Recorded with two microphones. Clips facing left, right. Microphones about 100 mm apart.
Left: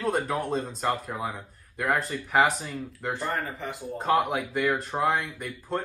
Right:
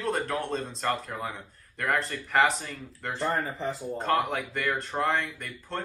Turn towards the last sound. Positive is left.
turn(degrees=5)  # may be behind; listen again after turning